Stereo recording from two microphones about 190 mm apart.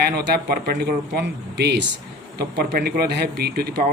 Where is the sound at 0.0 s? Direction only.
60° right (ahead or behind).